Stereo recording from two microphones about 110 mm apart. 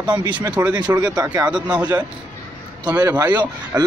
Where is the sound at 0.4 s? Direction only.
15° right (ahead or behind).